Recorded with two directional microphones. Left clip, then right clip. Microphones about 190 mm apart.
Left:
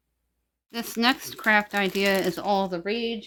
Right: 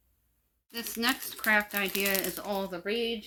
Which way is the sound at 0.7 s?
55° left (ahead or behind).